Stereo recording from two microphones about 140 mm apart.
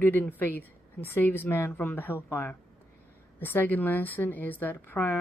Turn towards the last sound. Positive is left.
turn(degrees=15)  # may be behind; listen again after turning